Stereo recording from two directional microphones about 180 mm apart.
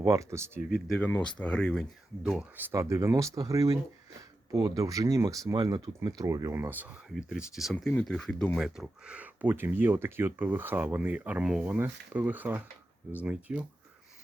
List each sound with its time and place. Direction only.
0.1 s speech: 15° right (ahead or behind)
0.9 s speech: 5° left (ahead or behind)
2.2 s speech: 10° right (ahead or behind)